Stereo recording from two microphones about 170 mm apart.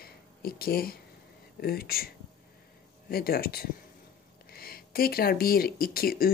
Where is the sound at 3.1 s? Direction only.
60° left (ahead or behind).